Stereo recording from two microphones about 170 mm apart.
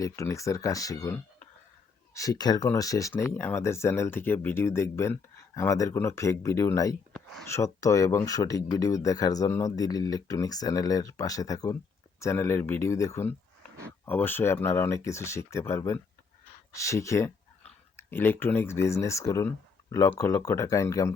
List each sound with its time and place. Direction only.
0.0 s speech: 20° left (ahead or behind)